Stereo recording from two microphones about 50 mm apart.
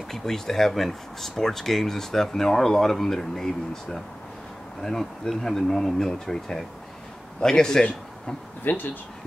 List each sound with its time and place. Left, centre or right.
0.1 s a man's voice: centre
8.6 s speech: left